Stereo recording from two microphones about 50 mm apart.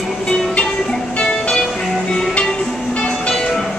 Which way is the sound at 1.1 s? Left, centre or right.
Centre.